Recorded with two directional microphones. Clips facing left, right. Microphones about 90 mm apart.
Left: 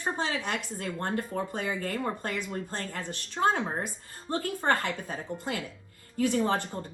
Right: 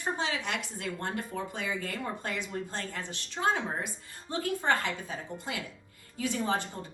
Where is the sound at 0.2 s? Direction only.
45° left (ahead or behind).